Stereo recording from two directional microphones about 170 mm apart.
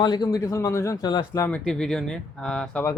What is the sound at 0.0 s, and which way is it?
A man's voice, 25° left (ahead or behind).